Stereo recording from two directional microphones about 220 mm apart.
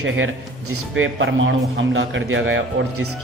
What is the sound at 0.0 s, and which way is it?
A man's voice, 65° right (ahead or behind).